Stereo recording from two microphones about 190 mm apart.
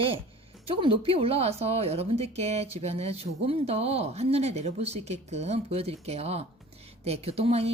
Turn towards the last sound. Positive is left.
turn(degrees=-35)  # may be behind; listen again after turning